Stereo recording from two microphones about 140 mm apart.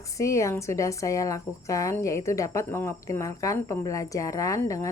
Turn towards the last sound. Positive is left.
turn(degrees=25)  # may be behind; listen again after turning